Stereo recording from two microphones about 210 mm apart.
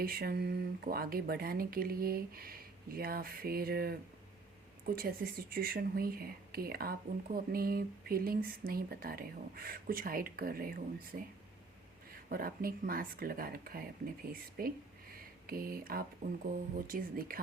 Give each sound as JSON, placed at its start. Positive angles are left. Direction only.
{"t": 0.0, "sound": "speech", "side_deg": -45}
{"t": 15.1, "sound": "a sound", "side_deg": -45}
{"t": 16.7, "sound": "speech", "side_deg": -40}